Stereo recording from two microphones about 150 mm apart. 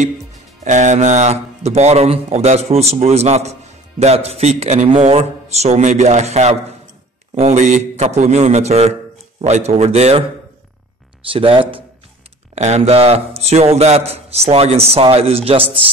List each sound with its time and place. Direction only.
0.7 s a man's voice: 55° right (ahead or behind)
11.3 s a man's voice: 40° right (ahead or behind)